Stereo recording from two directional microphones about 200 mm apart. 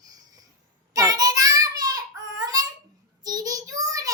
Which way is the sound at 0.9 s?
20° right (ahead or behind).